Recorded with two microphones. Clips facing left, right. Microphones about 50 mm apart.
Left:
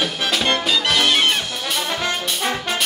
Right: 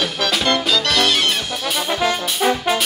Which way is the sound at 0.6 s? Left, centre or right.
Centre.